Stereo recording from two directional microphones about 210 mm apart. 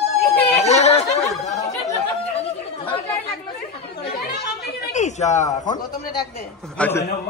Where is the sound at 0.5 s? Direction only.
30° left (ahead or behind).